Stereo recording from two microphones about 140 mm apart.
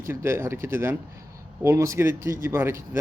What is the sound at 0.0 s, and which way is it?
Speech, 20° right (ahead or behind).